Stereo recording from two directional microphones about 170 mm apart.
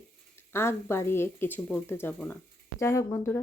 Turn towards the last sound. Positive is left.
turn(degrees=15)  # may be behind; listen again after turning